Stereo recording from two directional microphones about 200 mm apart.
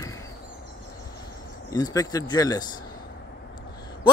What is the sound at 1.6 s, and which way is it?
A man's voice, 15° left (ahead or behind).